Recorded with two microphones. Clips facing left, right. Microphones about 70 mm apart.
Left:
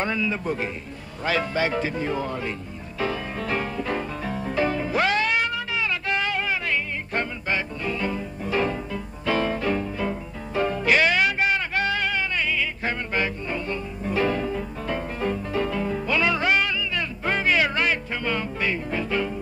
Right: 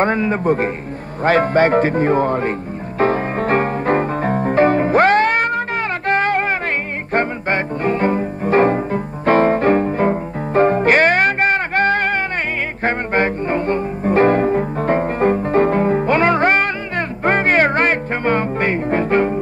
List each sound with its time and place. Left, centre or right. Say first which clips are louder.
0.0 s speech: right 9 dB; right
3.0 s music: right 11 dB; right